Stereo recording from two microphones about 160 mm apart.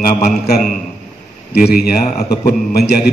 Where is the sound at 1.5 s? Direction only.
75° left (ahead or behind).